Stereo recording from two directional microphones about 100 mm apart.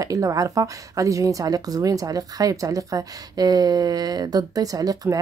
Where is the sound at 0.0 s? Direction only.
35° right (ahead or behind).